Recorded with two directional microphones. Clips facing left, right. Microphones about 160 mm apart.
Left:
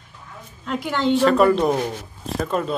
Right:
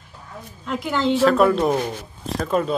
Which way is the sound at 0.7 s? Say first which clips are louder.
Even; centre (ahead or behind).